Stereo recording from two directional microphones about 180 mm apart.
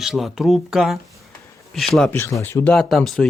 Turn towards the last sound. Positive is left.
turn(degrees=0)  # may be behind; listen again after turning